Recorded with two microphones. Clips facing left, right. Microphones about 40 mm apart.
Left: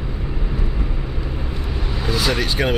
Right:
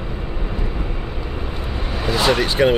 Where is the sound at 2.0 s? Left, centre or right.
Right.